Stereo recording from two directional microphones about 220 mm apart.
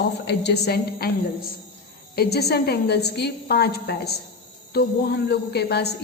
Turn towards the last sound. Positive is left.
turn(degrees=50)  # may be behind; listen again after turning